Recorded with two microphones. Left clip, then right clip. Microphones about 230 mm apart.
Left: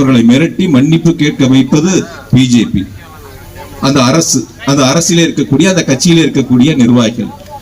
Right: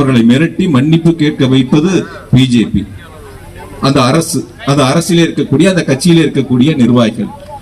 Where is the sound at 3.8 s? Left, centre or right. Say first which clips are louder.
Left 1 dB; left.